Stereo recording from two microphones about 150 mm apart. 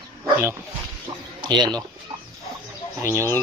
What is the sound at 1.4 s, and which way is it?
Speech, 30° right (ahead or behind).